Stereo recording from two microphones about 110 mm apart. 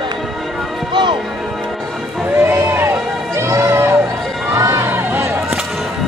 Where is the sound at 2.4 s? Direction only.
20° right (ahead or behind).